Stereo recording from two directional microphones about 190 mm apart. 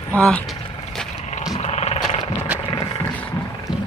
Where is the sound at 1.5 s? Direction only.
35° left (ahead or behind).